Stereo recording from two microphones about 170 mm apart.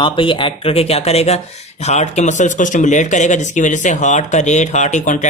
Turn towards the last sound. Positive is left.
turn(degrees=45)  # may be behind; listen again after turning